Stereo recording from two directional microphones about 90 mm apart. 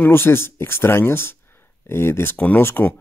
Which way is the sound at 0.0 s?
25° left (ahead or behind).